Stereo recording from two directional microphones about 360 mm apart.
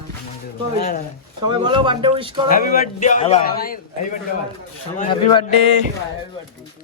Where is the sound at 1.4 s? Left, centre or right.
Centre.